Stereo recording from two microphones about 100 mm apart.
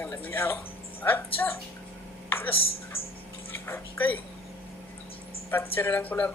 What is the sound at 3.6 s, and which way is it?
Speech, 20° left (ahead or behind).